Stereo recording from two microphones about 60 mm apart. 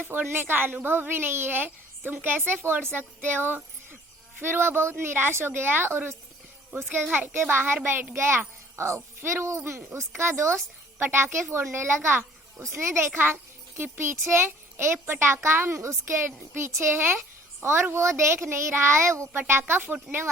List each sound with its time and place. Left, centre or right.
0.1 s a woman's voice: right
7.3 s a woman's voice: right
19.3 s a woman's voice: right